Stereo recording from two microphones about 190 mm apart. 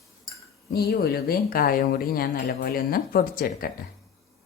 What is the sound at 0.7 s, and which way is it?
Speech, 55° left (ahead or behind).